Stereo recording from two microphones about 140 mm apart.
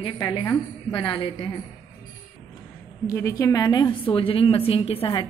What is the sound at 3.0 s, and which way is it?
A woman's voice, 25° left (ahead or behind).